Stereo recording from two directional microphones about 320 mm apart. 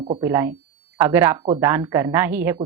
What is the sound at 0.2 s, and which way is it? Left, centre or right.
A woman's voice, centre.